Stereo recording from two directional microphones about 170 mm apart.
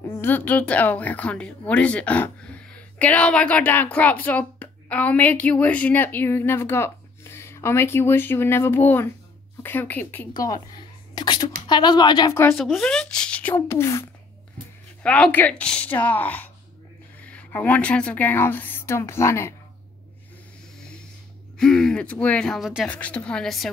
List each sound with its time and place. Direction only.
0.2 s speech: 10° left (ahead or behind)
10.3 s speech: 20° left (ahead or behind)
12.5 s speech: centre (ahead or behind); by 14.1 s 15° left (ahead or behind)
15.0 s speech: 5° left (ahead or behind)
21.5 s speech: 5° left (ahead or behind)
22.8 s speech: 10° left (ahead or behind)